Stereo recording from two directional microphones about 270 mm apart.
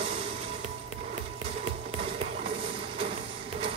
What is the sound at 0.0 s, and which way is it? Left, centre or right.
Music, right.